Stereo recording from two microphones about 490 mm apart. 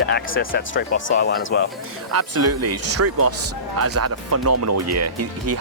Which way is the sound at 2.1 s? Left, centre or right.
Right.